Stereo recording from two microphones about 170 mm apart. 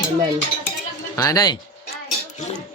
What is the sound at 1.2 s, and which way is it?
Speech, 20° left (ahead or behind).